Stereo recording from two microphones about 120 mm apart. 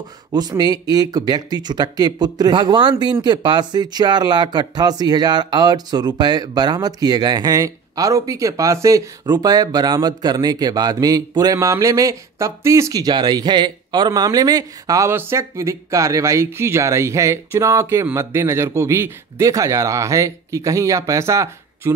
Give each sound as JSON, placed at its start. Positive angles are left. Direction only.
{"t": 0.3, "sound": "speech", "side_deg": -35}